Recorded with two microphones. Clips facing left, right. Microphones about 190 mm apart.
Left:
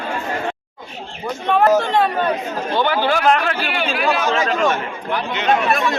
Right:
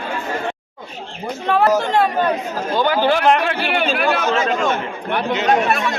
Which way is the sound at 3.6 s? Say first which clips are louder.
Right 3 dB; 55° right (ahead or behind).